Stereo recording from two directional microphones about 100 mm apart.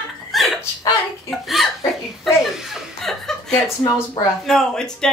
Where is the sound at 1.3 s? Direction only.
Centre (ahead or behind).